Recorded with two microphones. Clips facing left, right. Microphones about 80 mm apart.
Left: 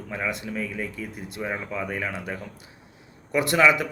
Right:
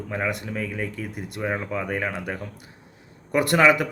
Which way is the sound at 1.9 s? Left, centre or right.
Right.